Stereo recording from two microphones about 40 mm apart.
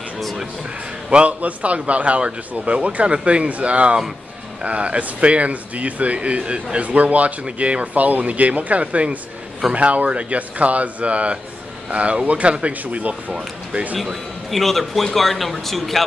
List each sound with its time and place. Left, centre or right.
1.1 s speech: right
13.9 s speech: centre